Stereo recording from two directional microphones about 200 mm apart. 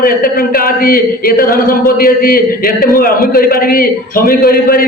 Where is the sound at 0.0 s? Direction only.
45° left (ahead or behind).